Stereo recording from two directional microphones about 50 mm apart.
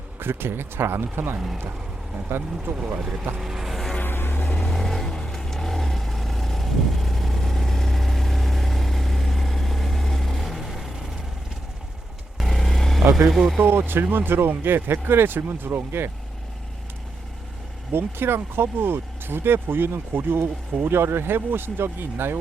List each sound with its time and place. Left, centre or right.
0.2 s speech: right
2.7 s speech: right
3.3 s vehicle: centre
4.0 s music: left
4.4 s vehicle: centre
12.4 s vehicle: centre
13.1 s speech: right
13.6 s speech: right
17.9 s speech: right